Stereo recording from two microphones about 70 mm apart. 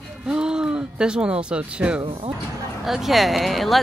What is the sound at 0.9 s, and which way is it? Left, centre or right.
Speech, centre.